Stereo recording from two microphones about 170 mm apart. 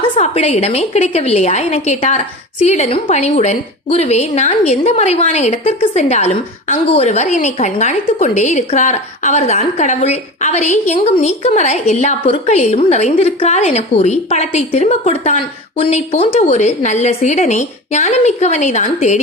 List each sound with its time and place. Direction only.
0.2 s a woman's voice: 40° left (ahead or behind)